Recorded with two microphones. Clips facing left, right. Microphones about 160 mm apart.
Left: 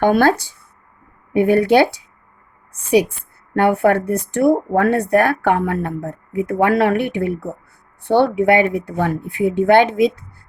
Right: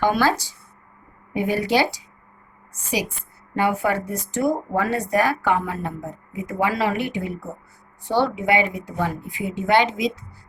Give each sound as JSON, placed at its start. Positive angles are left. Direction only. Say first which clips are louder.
{"t": 0.0, "sound": "speech", "louder": "left 6 dB", "side_deg": 55}
{"t": 3.5, "sound": "speech", "louder": "left 7 dB", "side_deg": 60}